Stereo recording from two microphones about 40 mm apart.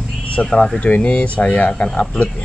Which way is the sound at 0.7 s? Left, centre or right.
Left.